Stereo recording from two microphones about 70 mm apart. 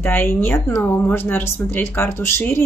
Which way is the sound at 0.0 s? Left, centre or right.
Left.